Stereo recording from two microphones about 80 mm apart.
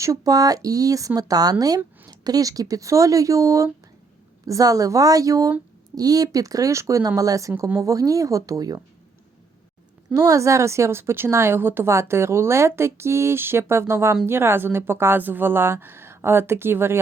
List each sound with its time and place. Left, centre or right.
0.0 s speech: right
10.2 s a woman's voice: right